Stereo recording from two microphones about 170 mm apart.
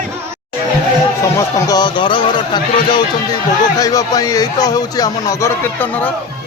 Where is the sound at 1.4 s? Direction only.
20° left (ahead or behind).